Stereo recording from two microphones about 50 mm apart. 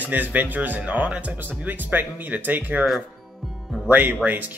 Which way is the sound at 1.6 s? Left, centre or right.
Right.